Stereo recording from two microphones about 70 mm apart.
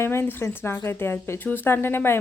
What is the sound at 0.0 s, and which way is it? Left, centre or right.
Speech, left.